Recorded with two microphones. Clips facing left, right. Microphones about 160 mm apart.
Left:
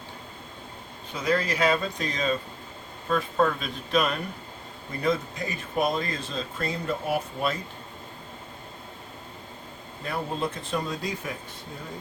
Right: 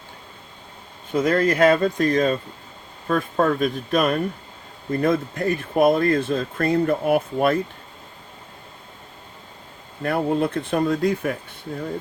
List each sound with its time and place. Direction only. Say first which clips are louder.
1.1 s speech: right 7 dB; 50° right (ahead or behind)
10.0 s speech: right 9 dB; 60° right (ahead or behind)